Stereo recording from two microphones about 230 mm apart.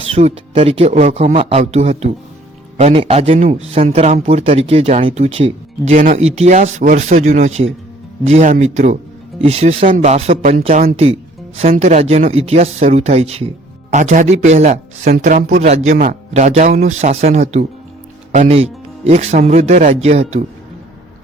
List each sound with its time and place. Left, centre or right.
0.1 s speech: right